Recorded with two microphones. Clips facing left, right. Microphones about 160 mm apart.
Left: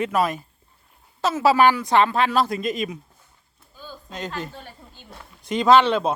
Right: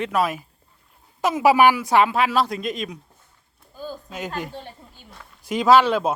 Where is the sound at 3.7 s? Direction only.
45° right (ahead or behind).